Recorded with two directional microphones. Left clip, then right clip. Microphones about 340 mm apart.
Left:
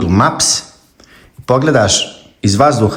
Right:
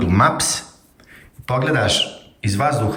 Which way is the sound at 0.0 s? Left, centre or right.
Centre.